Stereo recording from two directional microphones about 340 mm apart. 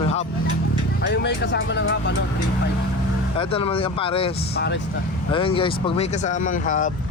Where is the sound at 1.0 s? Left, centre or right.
Left.